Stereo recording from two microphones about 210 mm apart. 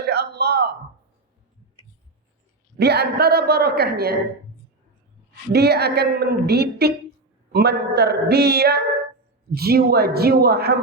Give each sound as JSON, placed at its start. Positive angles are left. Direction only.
{"t": 0.0, "sound": "a sound", "side_deg": -50}
{"t": 2.7, "sound": "a woman's voice", "side_deg": -50}
{"t": 5.5, "sound": "a woman's voice", "side_deg": -50}